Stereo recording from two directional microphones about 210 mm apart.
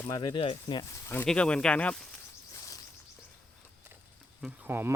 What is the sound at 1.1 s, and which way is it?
Speech, 5° left (ahead or behind).